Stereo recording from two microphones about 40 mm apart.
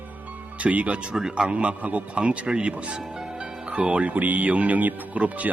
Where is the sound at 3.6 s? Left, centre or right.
Right.